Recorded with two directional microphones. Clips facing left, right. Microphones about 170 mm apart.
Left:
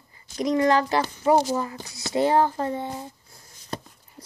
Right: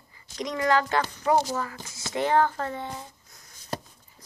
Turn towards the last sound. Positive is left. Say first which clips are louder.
# left 9 dB
turn(degrees=35)  # may be behind; listen again after turning